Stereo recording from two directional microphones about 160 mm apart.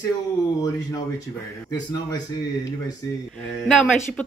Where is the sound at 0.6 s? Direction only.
20° left (ahead or behind).